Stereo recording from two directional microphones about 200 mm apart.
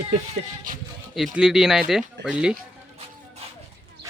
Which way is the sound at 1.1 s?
Centre (ahead or behind).